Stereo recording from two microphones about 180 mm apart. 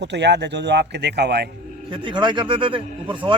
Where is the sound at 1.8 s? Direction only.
25° right (ahead or behind).